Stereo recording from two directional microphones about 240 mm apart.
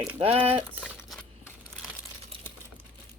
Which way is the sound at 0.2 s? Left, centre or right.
Right.